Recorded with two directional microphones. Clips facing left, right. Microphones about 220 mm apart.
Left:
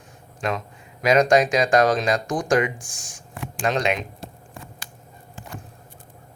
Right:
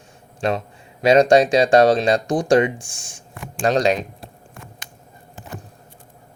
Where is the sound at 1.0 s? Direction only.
30° right (ahead or behind).